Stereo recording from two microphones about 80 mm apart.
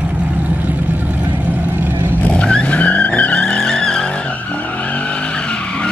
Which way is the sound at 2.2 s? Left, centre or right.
Centre.